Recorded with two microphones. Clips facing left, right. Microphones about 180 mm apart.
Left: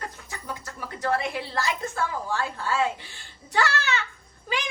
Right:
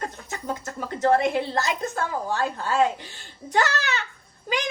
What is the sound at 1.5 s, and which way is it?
A woman's voice, 20° right (ahead or behind).